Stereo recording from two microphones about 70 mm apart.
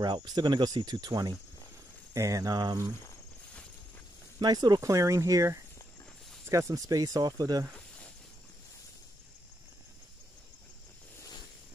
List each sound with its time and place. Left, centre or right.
0.0 s speech: right
2.1 s speech: right
4.4 s speech: right
4.8 s speech: right